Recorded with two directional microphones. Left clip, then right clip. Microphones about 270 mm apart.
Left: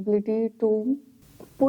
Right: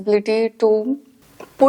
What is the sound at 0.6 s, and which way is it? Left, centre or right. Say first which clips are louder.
Speech: right 7 dB; right.